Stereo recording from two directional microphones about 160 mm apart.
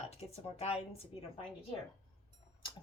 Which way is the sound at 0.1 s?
40° left (ahead or behind).